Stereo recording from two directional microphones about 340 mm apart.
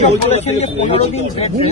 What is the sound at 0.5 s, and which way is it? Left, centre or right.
Speech, centre.